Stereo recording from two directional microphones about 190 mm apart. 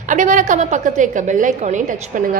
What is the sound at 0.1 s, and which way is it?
A woman's voice, 40° right (ahead or behind).